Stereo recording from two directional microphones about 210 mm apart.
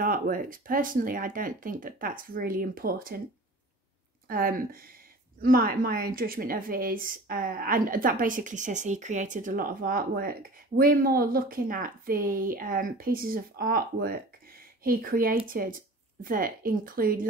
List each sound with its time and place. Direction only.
0.0 s speech: 40° right (ahead or behind)
4.3 s a woman's voice: 45° right (ahead or behind)